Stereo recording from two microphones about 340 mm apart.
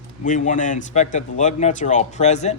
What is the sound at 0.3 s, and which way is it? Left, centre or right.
Speech, left.